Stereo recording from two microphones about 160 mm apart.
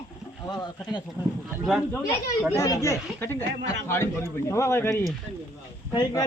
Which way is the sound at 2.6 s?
20° left (ahead or behind).